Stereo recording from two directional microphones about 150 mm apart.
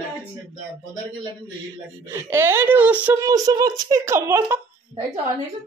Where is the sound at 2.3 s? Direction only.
15° right (ahead or behind).